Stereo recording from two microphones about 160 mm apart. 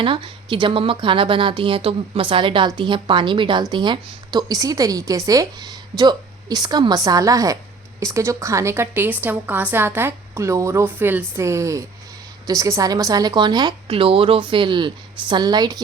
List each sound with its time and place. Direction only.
0.0 s a woman's voice: 30° right (ahead or behind)